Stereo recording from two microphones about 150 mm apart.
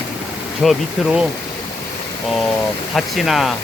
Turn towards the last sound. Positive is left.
turn(degrees=0)  # may be behind; listen again after turning